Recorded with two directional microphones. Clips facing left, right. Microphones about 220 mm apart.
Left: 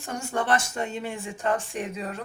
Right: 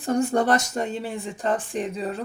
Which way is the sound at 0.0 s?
35° right (ahead or behind).